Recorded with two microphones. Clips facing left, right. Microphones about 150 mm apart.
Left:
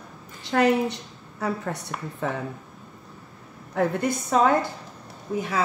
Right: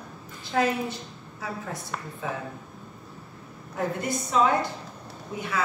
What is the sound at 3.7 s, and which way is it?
Speech, 55° left (ahead or behind).